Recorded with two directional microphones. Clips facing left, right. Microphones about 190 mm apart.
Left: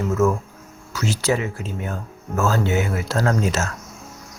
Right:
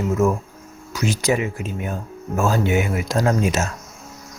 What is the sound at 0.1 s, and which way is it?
Speech, 15° right (ahead or behind).